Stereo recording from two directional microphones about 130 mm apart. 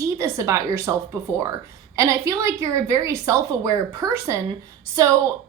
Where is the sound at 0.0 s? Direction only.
25° right (ahead or behind).